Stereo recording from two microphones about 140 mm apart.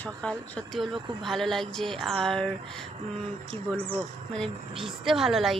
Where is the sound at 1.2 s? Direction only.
Centre (ahead or behind).